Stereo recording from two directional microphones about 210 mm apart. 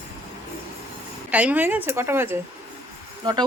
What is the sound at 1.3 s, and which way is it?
A woman's voice, 5° right (ahead or behind).